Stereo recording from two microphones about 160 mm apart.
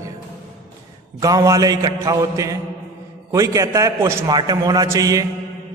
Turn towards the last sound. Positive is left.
turn(degrees=-20)  # may be behind; listen again after turning